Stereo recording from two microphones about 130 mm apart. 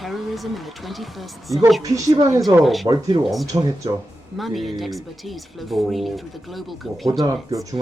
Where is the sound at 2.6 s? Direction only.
Centre (ahead or behind).